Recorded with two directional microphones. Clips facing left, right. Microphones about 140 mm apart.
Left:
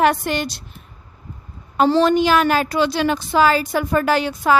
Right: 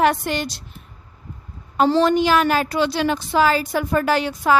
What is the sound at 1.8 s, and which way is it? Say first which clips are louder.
A woman's voice: left 1 dB; 90° left.